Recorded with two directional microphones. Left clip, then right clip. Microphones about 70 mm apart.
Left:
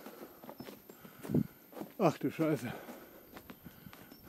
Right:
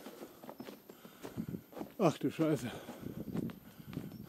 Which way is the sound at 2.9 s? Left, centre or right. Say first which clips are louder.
Right 7 dB; centre.